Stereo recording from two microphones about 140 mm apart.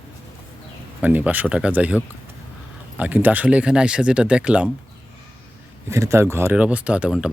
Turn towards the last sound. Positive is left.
turn(degrees=-5)  # may be behind; listen again after turning